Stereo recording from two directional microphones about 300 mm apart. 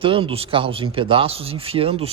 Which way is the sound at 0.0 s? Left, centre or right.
Centre.